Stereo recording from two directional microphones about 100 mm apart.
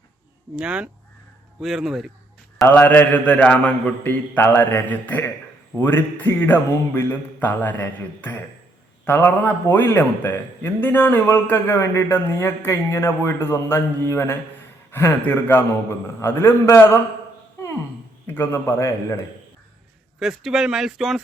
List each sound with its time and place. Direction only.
0.5 s speech: 10° right (ahead or behind)
2.6 s a man's voice: 20° left (ahead or behind)
18.3 s a man's voice: 25° left (ahead or behind)
20.1 s speech: 5° right (ahead or behind)